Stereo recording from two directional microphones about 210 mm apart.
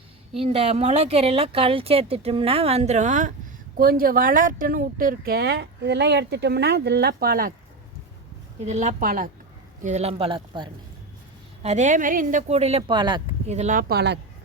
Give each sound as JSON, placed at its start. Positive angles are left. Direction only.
{"t": 0.3, "sound": "speech", "side_deg": -30}
{"t": 8.6, "sound": "speech", "side_deg": -35}
{"t": 11.6, "sound": "speech", "side_deg": -35}
{"t": 13.5, "sound": "speech", "side_deg": -35}